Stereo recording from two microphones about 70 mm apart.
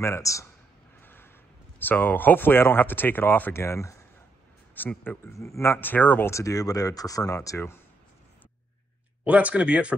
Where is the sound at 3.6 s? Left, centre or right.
Left.